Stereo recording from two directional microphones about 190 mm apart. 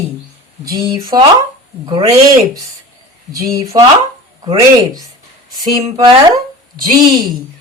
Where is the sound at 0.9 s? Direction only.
20° right (ahead or behind).